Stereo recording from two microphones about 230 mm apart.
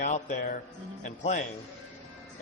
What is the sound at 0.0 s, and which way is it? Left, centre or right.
Music, left.